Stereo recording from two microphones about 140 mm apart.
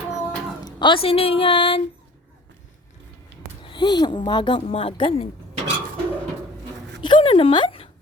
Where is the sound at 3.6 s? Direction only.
35° left (ahead or behind).